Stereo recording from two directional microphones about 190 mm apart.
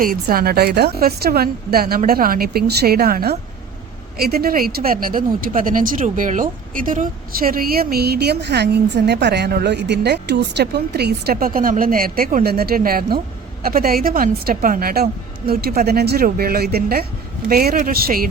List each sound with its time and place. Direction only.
0.0 s speech: 50° right (ahead or behind)